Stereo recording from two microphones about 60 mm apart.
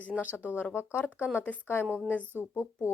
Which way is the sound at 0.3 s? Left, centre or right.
Left.